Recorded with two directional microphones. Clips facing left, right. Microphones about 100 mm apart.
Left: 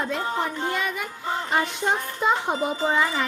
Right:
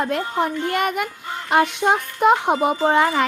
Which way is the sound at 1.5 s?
70° right (ahead or behind).